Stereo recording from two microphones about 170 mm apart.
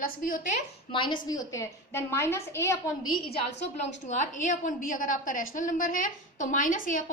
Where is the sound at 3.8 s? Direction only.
45° left (ahead or behind).